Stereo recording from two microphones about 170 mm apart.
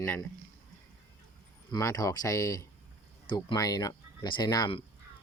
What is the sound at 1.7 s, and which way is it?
Speech, 20° left (ahead or behind).